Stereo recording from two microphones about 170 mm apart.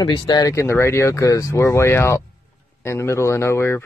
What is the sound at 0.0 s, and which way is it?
Speech, 25° left (ahead or behind).